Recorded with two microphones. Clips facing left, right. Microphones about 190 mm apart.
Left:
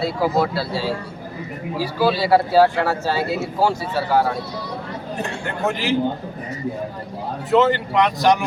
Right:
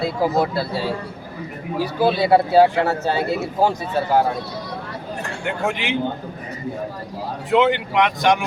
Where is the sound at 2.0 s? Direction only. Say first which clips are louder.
Right 1 dB; 55° right (ahead or behind).